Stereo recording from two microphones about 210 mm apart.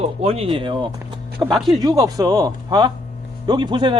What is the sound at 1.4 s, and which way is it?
Speech, centre (ahead or behind).